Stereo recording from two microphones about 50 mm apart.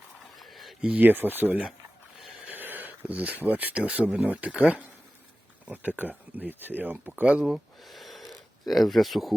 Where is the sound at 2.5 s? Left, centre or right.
Right.